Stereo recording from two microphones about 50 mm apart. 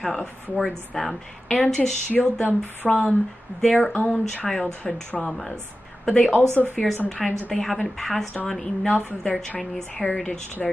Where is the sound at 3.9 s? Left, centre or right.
Left.